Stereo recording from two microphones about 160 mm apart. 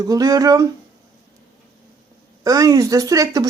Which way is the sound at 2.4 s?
20° right (ahead or behind).